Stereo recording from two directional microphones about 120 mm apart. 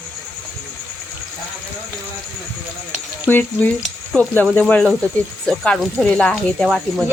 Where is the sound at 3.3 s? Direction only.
15° left (ahead or behind).